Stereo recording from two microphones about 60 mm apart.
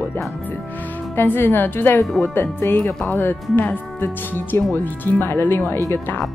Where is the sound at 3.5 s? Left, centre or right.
Left.